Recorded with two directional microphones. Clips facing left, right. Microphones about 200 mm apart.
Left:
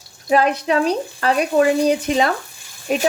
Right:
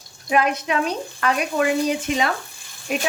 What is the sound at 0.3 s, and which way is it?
Speech, 35° left (ahead or behind).